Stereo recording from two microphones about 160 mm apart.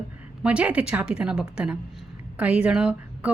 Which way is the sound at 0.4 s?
10° right (ahead or behind).